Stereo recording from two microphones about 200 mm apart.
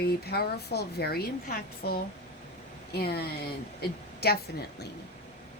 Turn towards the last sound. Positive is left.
turn(degrees=50)  # may be behind; listen again after turning